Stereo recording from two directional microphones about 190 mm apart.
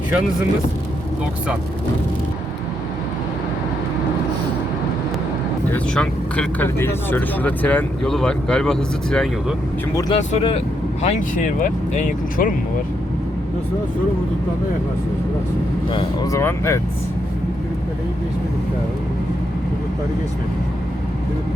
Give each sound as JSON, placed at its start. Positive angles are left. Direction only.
{"t": 5.7, "sound": "speech", "side_deg": 5}
{"t": 10.0, "sound": "speech", "side_deg": 30}
{"t": 11.0, "sound": "speech", "side_deg": 40}
{"t": 15.9, "sound": "speech", "side_deg": 20}